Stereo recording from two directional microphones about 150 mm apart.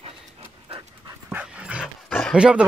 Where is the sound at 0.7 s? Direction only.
30° right (ahead or behind).